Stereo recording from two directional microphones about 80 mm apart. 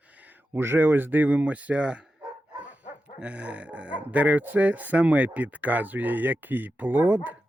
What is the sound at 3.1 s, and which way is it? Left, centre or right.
Speech, centre.